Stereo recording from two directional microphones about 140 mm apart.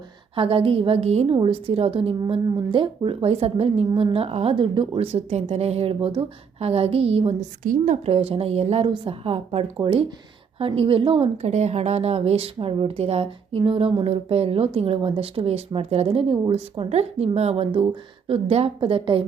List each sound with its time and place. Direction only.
0.3 s a woman's voice: 40° right (ahead or behind)
7.6 s a woman's voice: 70° right (ahead or behind)
8.0 s a woman's voice: 45° right (ahead or behind)